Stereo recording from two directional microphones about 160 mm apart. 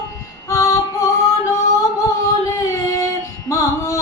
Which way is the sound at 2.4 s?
20° left (ahead or behind).